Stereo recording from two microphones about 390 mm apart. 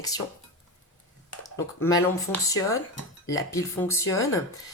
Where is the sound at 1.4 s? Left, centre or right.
Centre.